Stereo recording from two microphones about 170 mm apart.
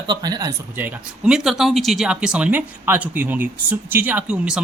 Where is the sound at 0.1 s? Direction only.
25° right (ahead or behind).